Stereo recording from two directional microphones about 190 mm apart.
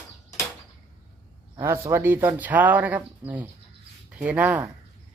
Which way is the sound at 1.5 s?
10° right (ahead or behind).